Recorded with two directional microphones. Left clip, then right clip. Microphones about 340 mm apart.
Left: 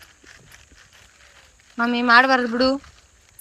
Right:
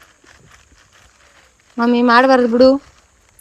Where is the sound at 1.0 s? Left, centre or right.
Centre.